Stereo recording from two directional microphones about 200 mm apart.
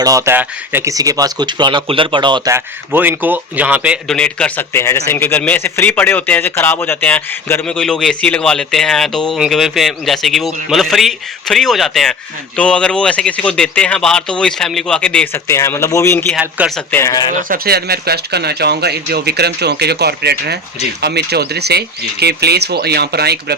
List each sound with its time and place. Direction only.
0.0 s speech: 15° right (ahead or behind); by 16.2 s 15° left (ahead or behind)
16.3 s speech: 5° right (ahead or behind)
17.0 s speech: 15° left (ahead or behind)
17.5 s speech: 50° right (ahead or behind)